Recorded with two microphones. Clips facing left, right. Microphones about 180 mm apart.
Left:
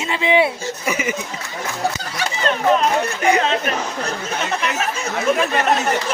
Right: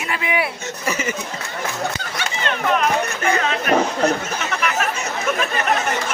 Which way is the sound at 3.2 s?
15° left (ahead or behind).